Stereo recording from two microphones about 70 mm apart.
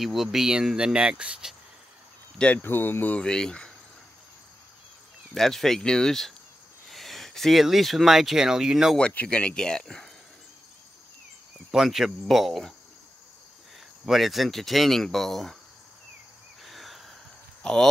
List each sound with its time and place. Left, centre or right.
0.0 s speech: centre
2.3 s speech: centre
2.6 s speech: left
3.2 s speech: centre
5.3 s speech: centre
8.9 s speech: centre
11.7 s speech: centre
14.0 s speech: centre
16.6 s a sound: centre
17.6 s speech: centre